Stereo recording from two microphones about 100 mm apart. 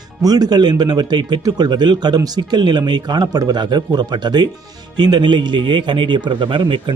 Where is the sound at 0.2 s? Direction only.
40° right (ahead or behind).